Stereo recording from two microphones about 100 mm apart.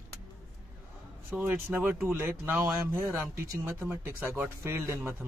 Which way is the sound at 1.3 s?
25° right (ahead or behind).